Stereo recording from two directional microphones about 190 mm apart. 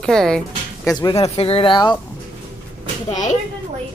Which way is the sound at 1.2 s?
30° left (ahead or behind).